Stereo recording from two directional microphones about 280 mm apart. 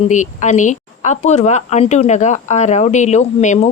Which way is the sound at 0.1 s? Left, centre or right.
Left.